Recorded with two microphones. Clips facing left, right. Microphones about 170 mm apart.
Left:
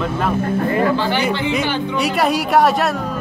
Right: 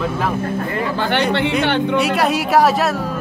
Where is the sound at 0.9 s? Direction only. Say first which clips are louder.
Right 1 dB; 60° right (ahead or behind).